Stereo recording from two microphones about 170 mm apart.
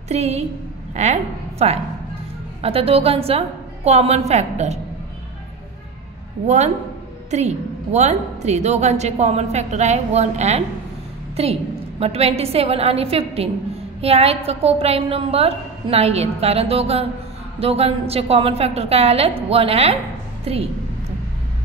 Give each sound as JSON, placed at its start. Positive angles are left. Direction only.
{"t": 0.1, "sound": "a woman's voice", "side_deg": -40}
{"t": 6.4, "sound": "a woman's voice", "side_deg": -40}